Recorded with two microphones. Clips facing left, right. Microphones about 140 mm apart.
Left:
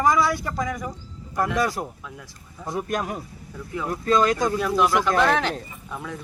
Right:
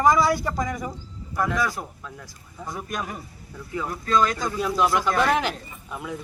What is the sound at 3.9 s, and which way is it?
Speech, 45° left (ahead or behind).